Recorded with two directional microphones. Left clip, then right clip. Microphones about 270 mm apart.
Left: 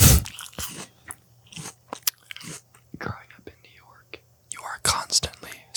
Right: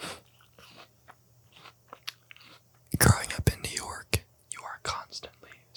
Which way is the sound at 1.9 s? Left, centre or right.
Left.